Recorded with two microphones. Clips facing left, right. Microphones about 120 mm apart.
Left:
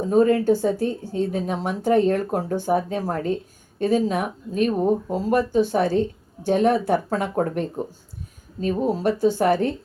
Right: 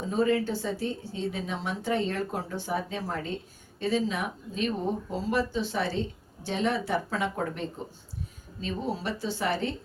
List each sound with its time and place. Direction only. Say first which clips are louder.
0.0 s a woman's voice: left 8 dB; 45° left (ahead or behind)
8.6 s a woman's voice: left 10 dB; 50° left (ahead or behind)